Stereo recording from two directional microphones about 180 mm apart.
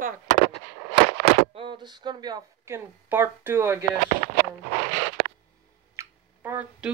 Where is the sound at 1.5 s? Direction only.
30° right (ahead or behind); by 3.8 s 10° right (ahead or behind).